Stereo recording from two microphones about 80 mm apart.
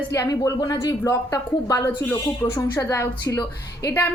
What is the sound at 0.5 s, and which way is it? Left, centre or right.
Speech, left.